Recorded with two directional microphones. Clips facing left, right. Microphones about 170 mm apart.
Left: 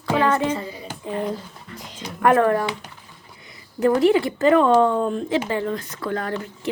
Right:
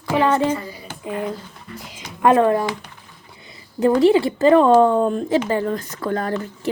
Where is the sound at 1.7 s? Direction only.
5° right (ahead or behind).